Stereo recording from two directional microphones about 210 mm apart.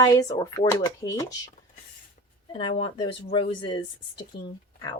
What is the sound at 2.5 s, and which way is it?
Speech, 25° left (ahead or behind).